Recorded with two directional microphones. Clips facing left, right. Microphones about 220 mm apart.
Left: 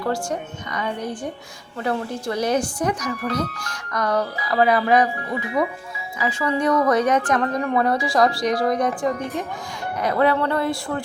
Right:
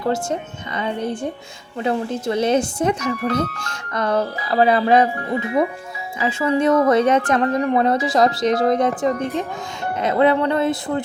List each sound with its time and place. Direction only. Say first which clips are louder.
0.0 s speech: right 3 dB; 25° right (ahead or behind)
6.1 s speech: right 4 dB; 25° right (ahead or behind)